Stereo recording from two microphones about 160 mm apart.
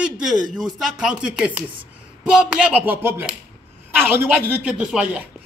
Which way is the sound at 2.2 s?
5° right (ahead or behind).